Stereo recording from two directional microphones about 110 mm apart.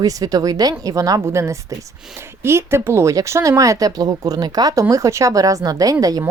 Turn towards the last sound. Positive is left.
turn(degrees=-35)  # may be behind; listen again after turning